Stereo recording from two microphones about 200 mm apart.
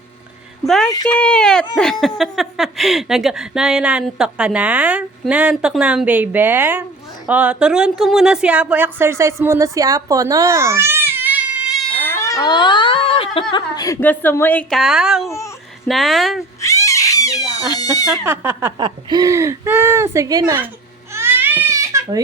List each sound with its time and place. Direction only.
1.1 s a woman's voice: 5° left (ahead or behind)
12.0 s a sound: 15° left (ahead or behind)
13.5 s a woman's voice: 20° left (ahead or behind); by 15.3 s 5° right (ahead or behind)
15.3 s speech: 15° left (ahead or behind)
15.9 s speech: centre (ahead or behind)
16.6 s speech: 15° left (ahead or behind)
18.3 s speech: 10° right (ahead or behind)
18.8 s speech: 25° right (ahead or behind)
21.1 s crying: 10° right (ahead or behind)